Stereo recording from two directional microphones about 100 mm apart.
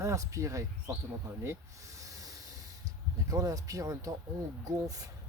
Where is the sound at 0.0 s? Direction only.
30° right (ahead or behind).